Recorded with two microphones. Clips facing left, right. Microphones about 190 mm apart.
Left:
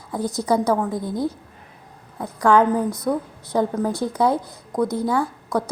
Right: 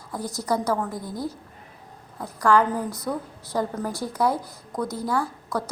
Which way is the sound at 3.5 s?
20° left (ahead or behind).